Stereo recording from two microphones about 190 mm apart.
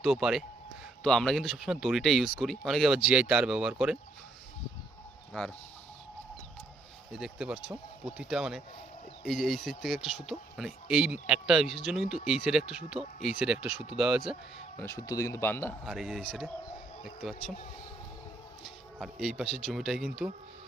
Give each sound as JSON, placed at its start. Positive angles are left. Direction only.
{"t": 0.0, "sound": "speech", "side_deg": 0}
{"t": 7.1, "sound": "speech", "side_deg": -5}
{"t": 14.8, "sound": "speech", "side_deg": 15}
{"t": 15.8, "sound": "speech", "side_deg": 0}
{"t": 18.6, "sound": "speech", "side_deg": 0}